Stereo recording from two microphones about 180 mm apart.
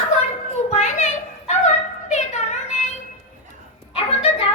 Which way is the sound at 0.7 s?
35° left (ahead or behind).